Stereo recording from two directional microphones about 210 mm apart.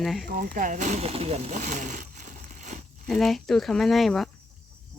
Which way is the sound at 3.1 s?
Centre (ahead or behind).